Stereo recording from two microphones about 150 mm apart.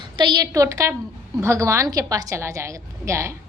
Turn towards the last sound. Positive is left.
turn(degrees=-20)  # may be behind; listen again after turning